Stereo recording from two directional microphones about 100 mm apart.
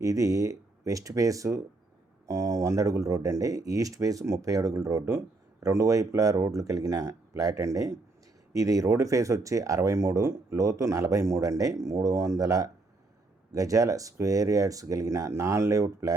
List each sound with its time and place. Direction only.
0.0 s speech: 35° right (ahead or behind)